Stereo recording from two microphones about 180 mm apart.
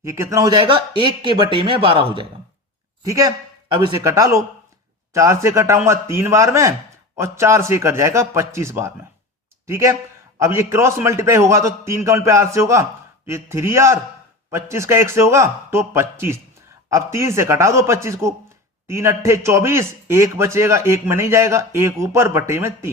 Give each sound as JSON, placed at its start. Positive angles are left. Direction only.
{"t": 0.0, "sound": "speech", "side_deg": -15}
{"t": 3.0, "sound": "a man's voice", "side_deg": -20}